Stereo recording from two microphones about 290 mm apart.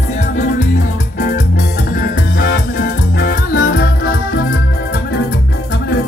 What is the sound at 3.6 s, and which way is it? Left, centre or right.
Music, left.